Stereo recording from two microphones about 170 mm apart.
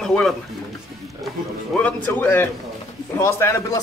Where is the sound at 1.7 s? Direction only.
10° left (ahead or behind).